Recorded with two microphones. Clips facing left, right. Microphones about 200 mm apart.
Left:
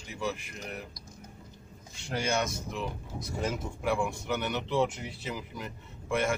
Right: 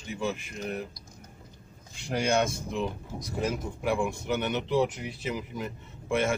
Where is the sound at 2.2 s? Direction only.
30° right (ahead or behind).